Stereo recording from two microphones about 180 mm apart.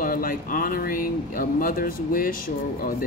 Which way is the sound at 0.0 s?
50° left (ahead or behind).